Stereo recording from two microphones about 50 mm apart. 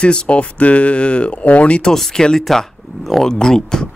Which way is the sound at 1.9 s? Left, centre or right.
Centre.